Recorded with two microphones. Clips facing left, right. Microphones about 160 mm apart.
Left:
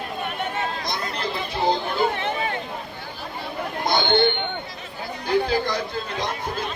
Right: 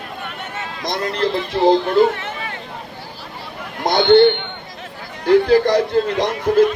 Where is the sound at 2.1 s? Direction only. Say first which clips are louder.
Left 3 dB; 20° left (ahead or behind).